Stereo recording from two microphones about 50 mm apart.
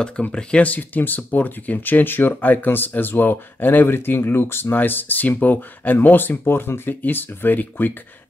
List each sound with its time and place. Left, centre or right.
0.3 s speech: centre
0.6 s speech: left